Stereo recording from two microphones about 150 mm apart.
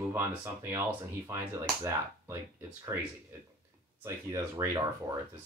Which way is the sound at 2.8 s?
20° right (ahead or behind).